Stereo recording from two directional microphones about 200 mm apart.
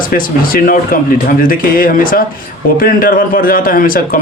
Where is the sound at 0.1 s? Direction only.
45° left (ahead or behind).